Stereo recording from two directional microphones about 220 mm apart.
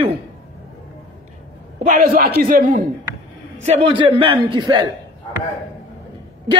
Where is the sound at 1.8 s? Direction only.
35° right (ahead or behind).